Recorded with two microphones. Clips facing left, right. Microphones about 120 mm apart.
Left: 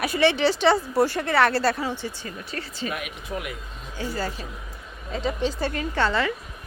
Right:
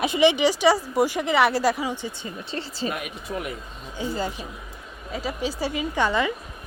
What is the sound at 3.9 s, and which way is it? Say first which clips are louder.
Speech: right 1 dB; 15° right (ahead or behind).